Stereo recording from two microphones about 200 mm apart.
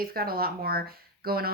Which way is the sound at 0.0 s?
50° right (ahead or behind).